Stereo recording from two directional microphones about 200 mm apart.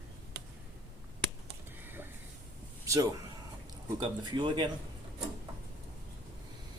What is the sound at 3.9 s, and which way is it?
Speech, 25° right (ahead or behind).